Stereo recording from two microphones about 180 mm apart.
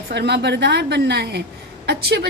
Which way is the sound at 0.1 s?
65° right (ahead or behind).